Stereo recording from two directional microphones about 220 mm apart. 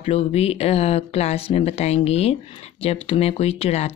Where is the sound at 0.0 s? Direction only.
25° left (ahead or behind).